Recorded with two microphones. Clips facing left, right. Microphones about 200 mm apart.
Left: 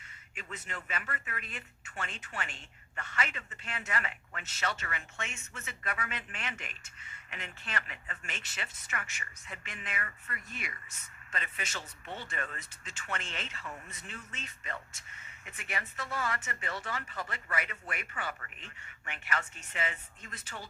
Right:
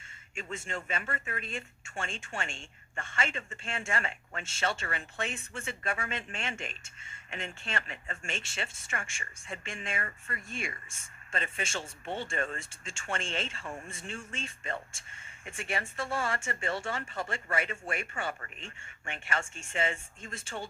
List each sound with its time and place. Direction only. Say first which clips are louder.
0.3 s speech: right 6 dB; 25° right (ahead or behind)